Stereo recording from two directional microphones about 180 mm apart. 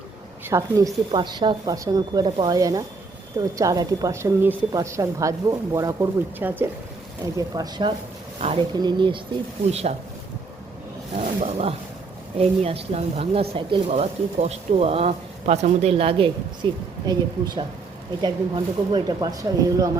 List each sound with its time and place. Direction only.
0.4 s a woman's voice: 15° right (ahead or behind)
7.3 s a woman's voice: 20° right (ahead or behind)
11.1 s a woman's voice: 40° right (ahead or behind); by 19.9 s 20° right (ahead or behind)